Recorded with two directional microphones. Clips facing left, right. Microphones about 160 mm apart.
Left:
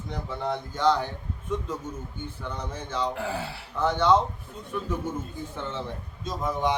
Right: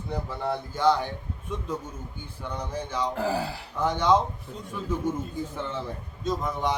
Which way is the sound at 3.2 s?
35° right (ahead or behind).